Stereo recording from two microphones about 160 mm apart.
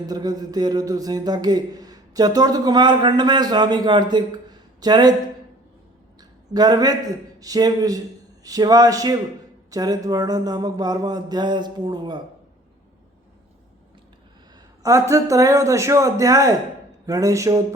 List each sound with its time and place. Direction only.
0.1 s speech: 25° right (ahead or behind)
6.1 s a man's voice: 25° right (ahead or behind)
14.8 s speech: 20° right (ahead or behind)